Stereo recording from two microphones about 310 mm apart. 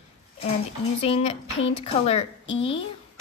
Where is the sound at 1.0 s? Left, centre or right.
Centre.